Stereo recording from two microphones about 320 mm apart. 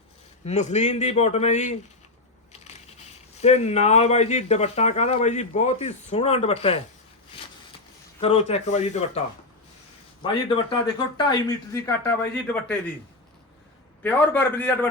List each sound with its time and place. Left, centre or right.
0.4 s speech: left
3.4 s speech: centre
8.2 s speech: centre
10.5 s speech: centre
14.0 s a man's voice: centre